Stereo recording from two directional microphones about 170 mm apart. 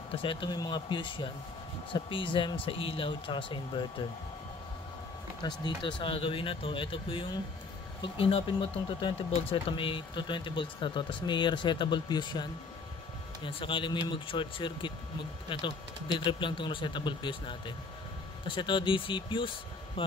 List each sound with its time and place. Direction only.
0.1 s speech: 30° left (ahead or behind)
5.6 s speech: 30° left (ahead or behind)